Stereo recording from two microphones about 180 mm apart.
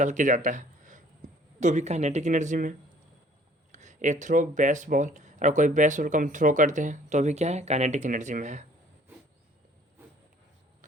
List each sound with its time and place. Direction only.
0.0 s speech: 45° right (ahead or behind)